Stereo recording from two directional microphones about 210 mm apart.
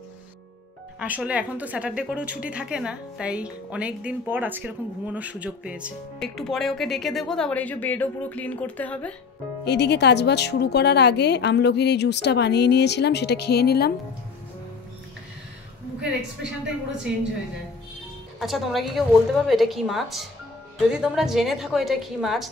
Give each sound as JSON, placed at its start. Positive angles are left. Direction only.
{"t": 0.9, "sound": "a woman's voice", "side_deg": -5}
{"t": 9.7, "sound": "a woman's voice", "side_deg": 55}
{"t": 17.1, "sound": "a woman's voice", "side_deg": -5}
{"t": 18.4, "sound": "a woman's voice", "side_deg": 0}